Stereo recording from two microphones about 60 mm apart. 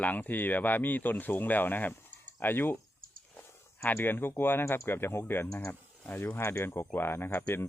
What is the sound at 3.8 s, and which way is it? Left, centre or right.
Speech, left.